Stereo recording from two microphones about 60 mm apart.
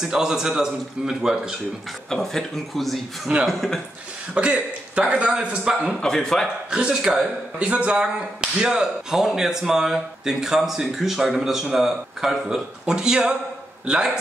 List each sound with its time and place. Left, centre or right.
0.0 s speech: centre
2.0 s a man's voice: centre
4.3 s speech: right
5.9 s speech: centre
6.7 s speech: centre